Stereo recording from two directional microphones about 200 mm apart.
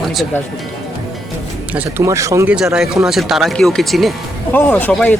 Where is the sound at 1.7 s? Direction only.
10° right (ahead or behind).